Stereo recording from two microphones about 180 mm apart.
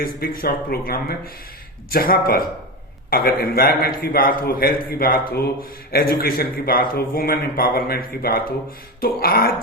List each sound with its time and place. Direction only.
0.0 s a man's voice: 55° left (ahead or behind)